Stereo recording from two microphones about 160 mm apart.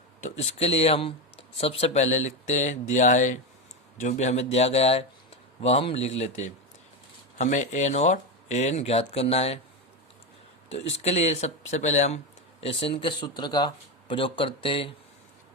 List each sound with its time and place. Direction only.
0.2 s speech: 40° left (ahead or behind)
10.7 s speech: 40° left (ahead or behind)